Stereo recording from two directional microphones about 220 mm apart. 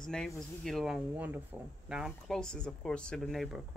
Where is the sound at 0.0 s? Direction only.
5° left (ahead or behind).